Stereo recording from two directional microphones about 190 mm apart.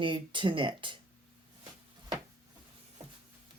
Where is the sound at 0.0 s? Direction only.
25° right (ahead or behind).